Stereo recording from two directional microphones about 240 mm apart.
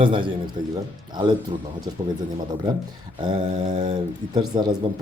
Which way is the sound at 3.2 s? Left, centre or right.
Centre.